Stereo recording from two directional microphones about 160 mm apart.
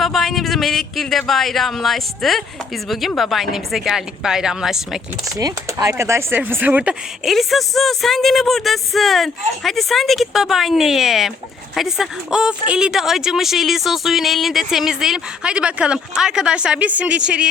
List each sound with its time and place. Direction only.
0.0 s speech: centre (ahead or behind)
5.4 s speech: 25° right (ahead or behind); by 17.5 s 5° right (ahead or behind)